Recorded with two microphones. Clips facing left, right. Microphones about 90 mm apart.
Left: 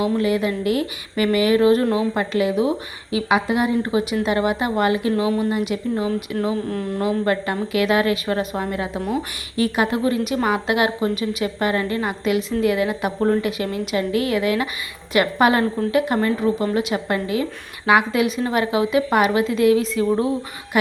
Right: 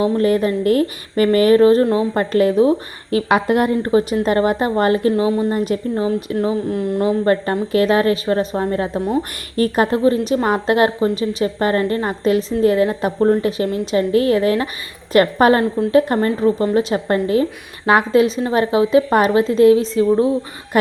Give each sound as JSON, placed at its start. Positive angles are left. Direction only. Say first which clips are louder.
{"t": 0.0, "sound": "a woman's voice", "louder": "right 4 dB", "side_deg": -45}
{"t": 2.1, "sound": "a woman's voice", "louder": "right 5 dB", "side_deg": -45}
{"t": 3.1, "sound": "a woman's voice", "louder": "right 4 dB", "side_deg": -50}
{"t": 5.1, "sound": "a woman's voice", "louder": "right 3 dB", "side_deg": -30}
{"t": 6.3, "sound": "a woman's voice", "louder": "right 4 dB", "side_deg": -25}